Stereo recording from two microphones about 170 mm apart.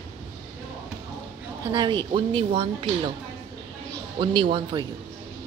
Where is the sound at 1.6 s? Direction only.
25° right (ahead or behind).